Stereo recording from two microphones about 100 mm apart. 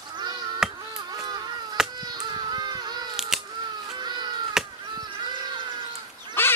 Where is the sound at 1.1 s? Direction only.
40° right (ahead or behind).